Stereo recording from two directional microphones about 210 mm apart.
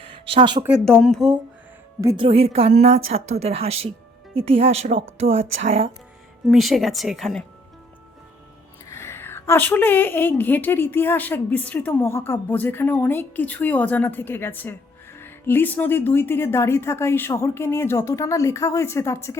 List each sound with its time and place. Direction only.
0.0 s a sound: 25° right (ahead or behind)
0.9 s speech: 5° left (ahead or behind)
2.0 s speech: 15° right (ahead or behind)
2.2 s a woman's voice: 25° right (ahead or behind)
6.5 s speech: centre (ahead or behind)
8.9 s a woman's voice: 10° left (ahead or behind)